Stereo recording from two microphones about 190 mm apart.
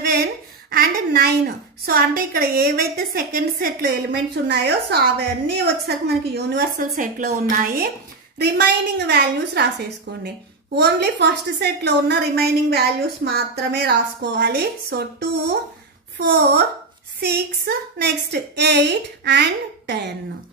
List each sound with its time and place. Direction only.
0.7 s a woman's voice: 55° right (ahead or behind)